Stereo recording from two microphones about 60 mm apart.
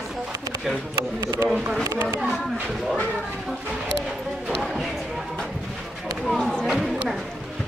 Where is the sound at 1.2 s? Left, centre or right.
Right.